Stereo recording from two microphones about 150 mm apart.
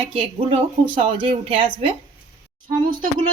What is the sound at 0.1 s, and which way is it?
A woman's voice, 40° right (ahead or behind).